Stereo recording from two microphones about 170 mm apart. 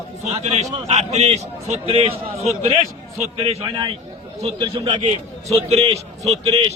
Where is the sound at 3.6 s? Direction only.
25° right (ahead or behind).